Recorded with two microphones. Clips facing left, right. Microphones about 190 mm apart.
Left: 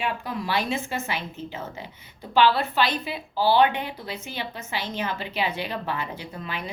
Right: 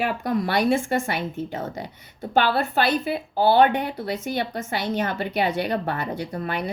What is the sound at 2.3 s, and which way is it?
A woman's voice, 50° right (ahead or behind).